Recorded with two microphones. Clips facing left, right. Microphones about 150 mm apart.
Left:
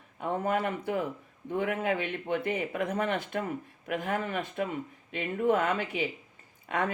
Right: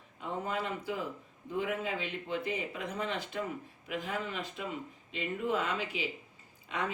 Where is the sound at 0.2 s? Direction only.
60° left (ahead or behind).